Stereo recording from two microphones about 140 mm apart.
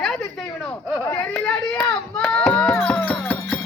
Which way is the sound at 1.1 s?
20° left (ahead or behind).